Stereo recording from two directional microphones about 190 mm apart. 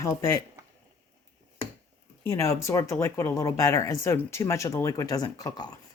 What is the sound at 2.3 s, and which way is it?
Speech, 15° left (ahead or behind).